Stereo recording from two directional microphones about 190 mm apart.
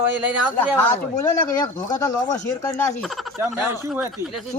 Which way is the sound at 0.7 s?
10° left (ahead or behind).